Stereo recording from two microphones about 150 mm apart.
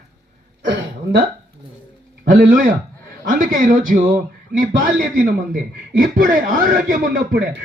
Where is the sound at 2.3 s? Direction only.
65° right (ahead or behind).